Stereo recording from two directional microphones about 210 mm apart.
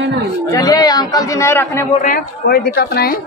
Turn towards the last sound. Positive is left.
turn(degrees=50)  # may be behind; listen again after turning